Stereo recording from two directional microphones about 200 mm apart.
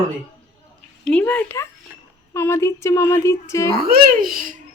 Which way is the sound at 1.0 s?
5° left (ahead or behind).